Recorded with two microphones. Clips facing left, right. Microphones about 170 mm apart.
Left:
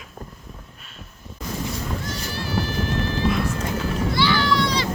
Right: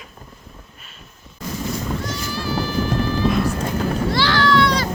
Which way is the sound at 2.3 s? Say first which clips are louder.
Right 3 dB; 65° left (ahead or behind).